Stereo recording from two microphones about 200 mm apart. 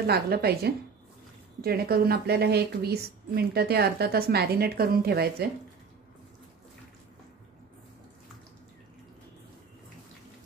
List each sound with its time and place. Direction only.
0.0 s a woman's voice: 50° right (ahead or behind)